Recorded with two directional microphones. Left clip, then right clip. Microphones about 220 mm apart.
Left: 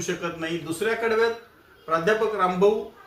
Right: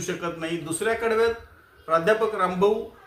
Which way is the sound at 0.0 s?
15° right (ahead or behind).